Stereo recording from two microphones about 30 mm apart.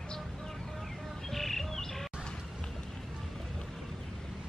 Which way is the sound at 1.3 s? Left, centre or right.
Centre.